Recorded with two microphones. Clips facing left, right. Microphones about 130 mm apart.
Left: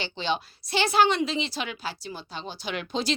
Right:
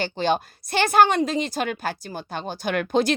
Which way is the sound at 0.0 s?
50° right (ahead or behind).